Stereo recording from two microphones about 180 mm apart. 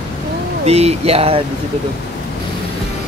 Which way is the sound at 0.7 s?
35° right (ahead or behind).